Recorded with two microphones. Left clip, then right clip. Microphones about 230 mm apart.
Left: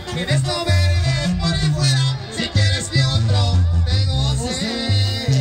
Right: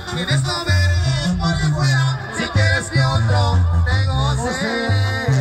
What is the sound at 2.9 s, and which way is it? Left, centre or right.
Music, centre.